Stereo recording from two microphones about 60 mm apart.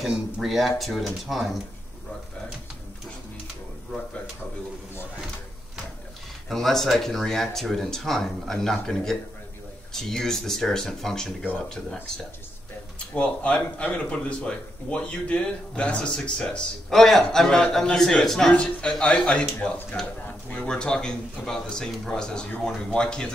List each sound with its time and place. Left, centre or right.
0.0 s speech: centre
6.5 s speech: centre
13.1 s speech: left